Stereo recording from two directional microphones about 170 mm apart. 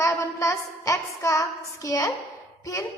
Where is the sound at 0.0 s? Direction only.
20° left (ahead or behind).